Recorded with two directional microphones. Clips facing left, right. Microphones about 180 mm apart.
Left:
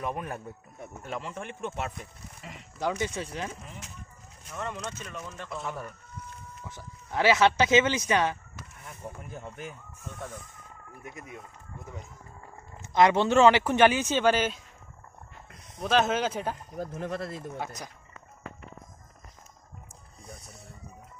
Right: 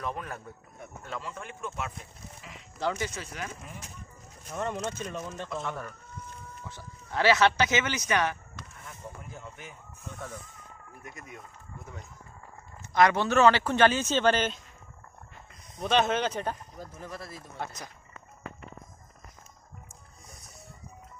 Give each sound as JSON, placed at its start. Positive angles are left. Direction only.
{"t": 0.0, "sound": "a man's voice", "side_deg": 15}
{"t": 2.7, "sound": "a man's voice", "side_deg": 15}
{"t": 3.2, "sound": "speech", "side_deg": 25}
{"t": 4.5, "sound": "speech", "side_deg": -40}
{"t": 5.5, "sound": "speech", "side_deg": 5}
{"t": 6.7, "sound": "speech", "side_deg": 20}
{"t": 12.9, "sound": "a man's voice", "side_deg": 20}
{"t": 15.8, "sound": "speech", "side_deg": 0}
{"t": 16.7, "sound": "speech", "side_deg": 60}